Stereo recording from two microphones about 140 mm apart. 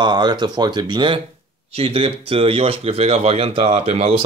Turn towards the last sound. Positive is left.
turn(degrees=-50)  # may be behind; listen again after turning